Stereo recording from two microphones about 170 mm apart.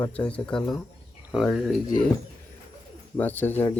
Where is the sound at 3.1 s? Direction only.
10° left (ahead or behind).